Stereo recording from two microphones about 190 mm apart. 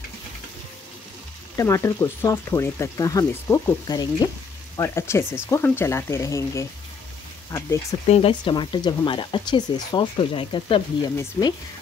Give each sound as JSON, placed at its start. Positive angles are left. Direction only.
{"t": 1.6, "sound": "speech", "side_deg": 15}
{"t": 8.1, "sound": "speech", "side_deg": 30}